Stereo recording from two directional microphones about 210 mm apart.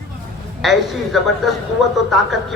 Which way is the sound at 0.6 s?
Centre (ahead or behind).